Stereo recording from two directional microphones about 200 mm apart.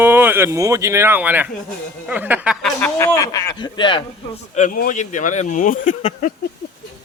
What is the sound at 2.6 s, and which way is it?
Speech, 10° left (ahead or behind).